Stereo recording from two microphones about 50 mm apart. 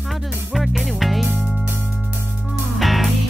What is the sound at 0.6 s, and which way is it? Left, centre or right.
Music, centre.